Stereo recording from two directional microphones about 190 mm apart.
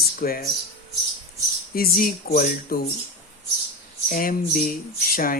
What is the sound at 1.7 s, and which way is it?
Speech, 50° left (ahead or behind).